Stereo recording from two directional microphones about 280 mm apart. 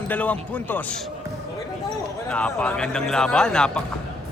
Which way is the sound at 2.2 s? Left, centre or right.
Centre.